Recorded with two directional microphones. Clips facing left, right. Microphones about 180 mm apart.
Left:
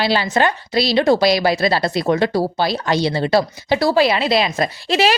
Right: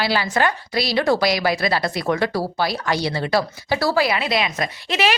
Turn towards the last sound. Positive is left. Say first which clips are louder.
# left 4 dB
turn(degrees=30)  # may be behind; listen again after turning